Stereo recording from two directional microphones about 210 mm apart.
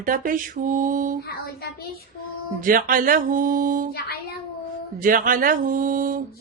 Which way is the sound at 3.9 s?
50° left (ahead or behind).